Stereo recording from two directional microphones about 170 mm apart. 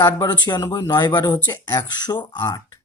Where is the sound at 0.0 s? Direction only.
20° left (ahead or behind).